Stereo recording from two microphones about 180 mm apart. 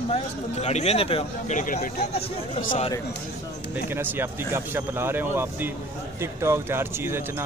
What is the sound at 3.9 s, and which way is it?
Speech, 15° right (ahead or behind).